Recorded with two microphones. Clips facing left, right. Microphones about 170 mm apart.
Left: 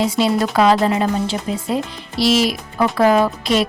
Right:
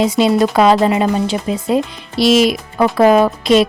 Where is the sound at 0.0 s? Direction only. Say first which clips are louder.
Right 4 dB; 20° right (ahead or behind).